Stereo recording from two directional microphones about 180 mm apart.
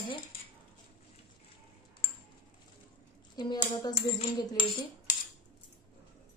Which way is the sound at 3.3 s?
25° left (ahead or behind).